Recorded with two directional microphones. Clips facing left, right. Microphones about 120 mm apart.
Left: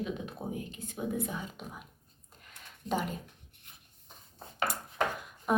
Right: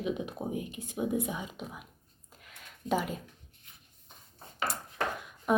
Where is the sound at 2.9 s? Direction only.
5° right (ahead or behind).